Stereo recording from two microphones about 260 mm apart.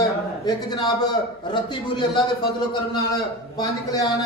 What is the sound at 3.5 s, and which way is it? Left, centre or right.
Speech, centre.